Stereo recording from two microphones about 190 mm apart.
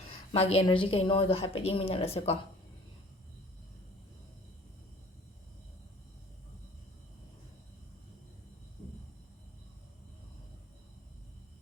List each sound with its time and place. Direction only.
0.3 s a woman's voice: 30° left (ahead or behind)